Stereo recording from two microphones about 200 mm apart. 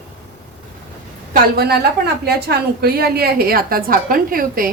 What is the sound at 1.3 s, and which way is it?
A woman's voice, 50° right (ahead or behind).